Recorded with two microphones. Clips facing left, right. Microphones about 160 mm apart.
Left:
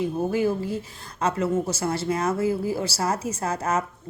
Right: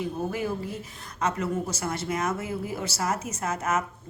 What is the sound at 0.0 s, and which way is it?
Speech, 30° left (ahead or behind).